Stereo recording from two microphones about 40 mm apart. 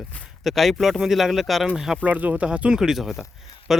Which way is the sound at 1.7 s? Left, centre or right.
Centre.